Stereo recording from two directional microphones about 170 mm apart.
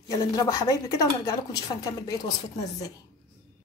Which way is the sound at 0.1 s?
20° left (ahead or behind).